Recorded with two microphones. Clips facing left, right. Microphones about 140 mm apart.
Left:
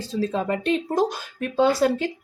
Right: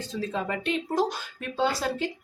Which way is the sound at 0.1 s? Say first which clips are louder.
Left 6 dB; 35° left (ahead or behind).